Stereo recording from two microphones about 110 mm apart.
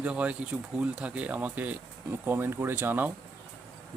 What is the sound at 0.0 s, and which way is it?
Speech, 10° right (ahead or behind).